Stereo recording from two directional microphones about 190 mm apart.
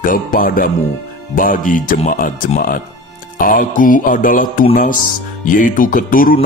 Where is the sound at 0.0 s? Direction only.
45° left (ahead or behind).